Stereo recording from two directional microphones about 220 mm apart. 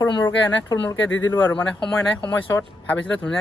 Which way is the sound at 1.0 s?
60° left (ahead or behind).